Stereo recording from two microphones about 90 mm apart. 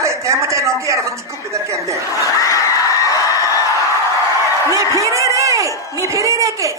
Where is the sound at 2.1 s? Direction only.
35° left (ahead or behind).